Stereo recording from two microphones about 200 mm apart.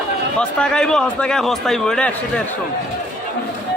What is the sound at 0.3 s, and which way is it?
A man's voice, 5° left (ahead or behind).